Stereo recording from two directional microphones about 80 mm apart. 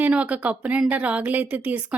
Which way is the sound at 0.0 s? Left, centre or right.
Centre.